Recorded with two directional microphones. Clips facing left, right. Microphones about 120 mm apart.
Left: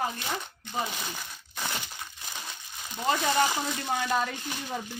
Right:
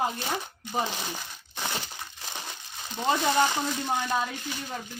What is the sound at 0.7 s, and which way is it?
Speech, 30° right (ahead or behind).